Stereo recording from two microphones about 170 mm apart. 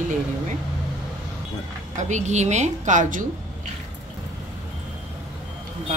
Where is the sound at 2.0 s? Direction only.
45° right (ahead or behind).